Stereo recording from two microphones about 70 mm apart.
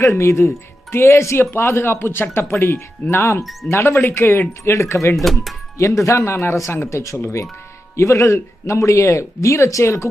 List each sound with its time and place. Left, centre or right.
0.0 s speech: left
5.1 s speech: centre
5.7 s speech: left